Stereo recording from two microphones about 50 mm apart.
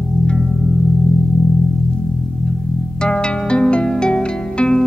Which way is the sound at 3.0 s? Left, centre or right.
Centre.